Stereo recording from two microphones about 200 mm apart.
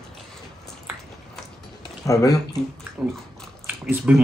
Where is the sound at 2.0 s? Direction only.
15° left (ahead or behind).